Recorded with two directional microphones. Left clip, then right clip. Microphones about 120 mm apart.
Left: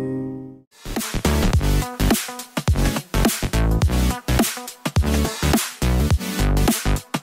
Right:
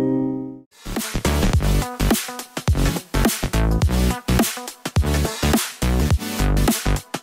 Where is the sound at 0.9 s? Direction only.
Centre (ahead or behind).